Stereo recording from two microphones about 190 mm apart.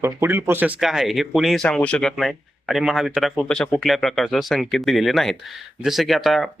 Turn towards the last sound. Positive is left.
turn(degrees=0)  # may be behind; listen again after turning